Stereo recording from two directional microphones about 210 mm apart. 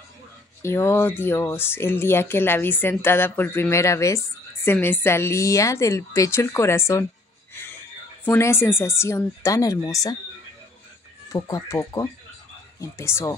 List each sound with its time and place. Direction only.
0.6 s speech: 10° left (ahead or behind)
8.3 s speech: 10° left (ahead or behind)
11.3 s speech: 15° left (ahead or behind)